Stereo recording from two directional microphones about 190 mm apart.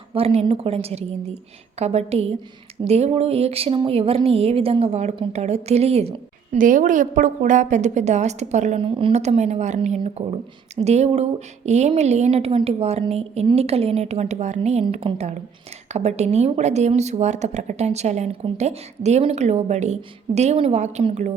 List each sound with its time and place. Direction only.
0.1 s speech: 30° right (ahead or behind)